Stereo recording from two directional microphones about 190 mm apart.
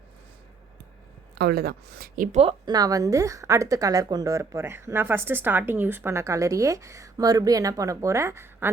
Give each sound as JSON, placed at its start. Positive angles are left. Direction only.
{"t": 1.4, "sound": "speech", "side_deg": -55}
{"t": 2.4, "sound": "a woman's voice", "side_deg": -25}